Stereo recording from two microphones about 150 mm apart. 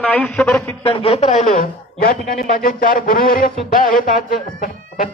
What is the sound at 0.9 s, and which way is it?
A man's voice, 40° left (ahead or behind).